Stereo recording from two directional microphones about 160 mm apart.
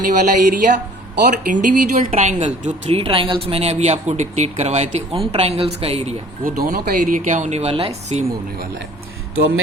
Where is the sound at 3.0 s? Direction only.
35° right (ahead or behind).